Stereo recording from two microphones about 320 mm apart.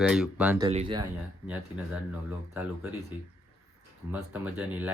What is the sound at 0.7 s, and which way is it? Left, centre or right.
Speech, centre.